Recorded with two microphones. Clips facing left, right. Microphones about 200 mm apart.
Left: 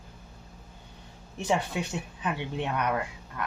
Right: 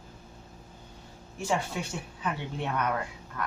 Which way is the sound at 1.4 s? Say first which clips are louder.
Left 2 dB; 20° left (ahead or behind).